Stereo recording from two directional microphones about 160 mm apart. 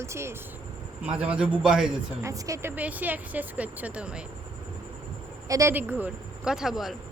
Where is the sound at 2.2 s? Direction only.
20° right (ahead or behind).